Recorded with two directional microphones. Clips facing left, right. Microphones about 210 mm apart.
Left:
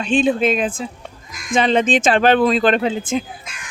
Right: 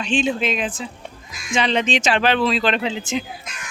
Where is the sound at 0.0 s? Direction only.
50° left (ahead or behind).